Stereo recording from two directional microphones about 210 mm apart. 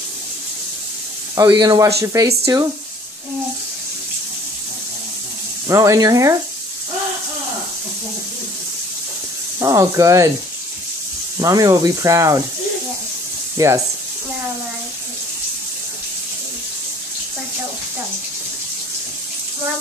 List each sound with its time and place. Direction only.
1.3 s speech: 15° right (ahead or behind)
5.7 s speech: 15° right (ahead or behind)
9.6 s speech: 15° right (ahead or behind)
11.4 s speech: 15° right (ahead or behind)
13.6 s speech: 15° right (ahead or behind)